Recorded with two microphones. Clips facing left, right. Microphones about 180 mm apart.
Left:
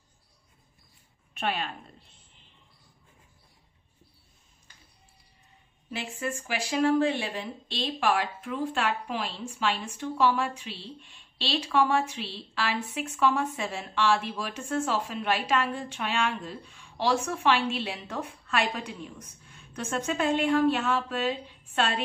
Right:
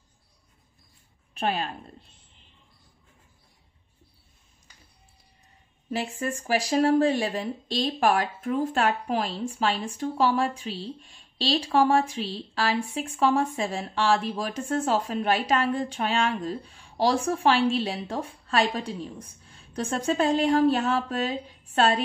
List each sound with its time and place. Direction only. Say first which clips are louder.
1.3 s a woman's voice: right 3 dB; 35° right (ahead or behind)
5.9 s speech: right 4 dB; 40° right (ahead or behind)